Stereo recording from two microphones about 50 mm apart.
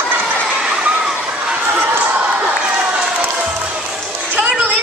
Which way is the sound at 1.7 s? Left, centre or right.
Right.